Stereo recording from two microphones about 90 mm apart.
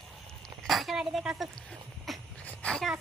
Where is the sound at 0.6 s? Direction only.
Centre (ahead or behind).